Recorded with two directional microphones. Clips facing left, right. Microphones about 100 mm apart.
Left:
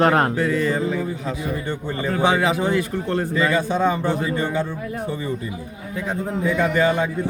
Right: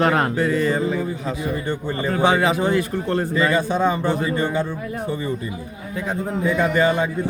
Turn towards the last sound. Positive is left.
turn(degrees=-35)  # may be behind; listen again after turning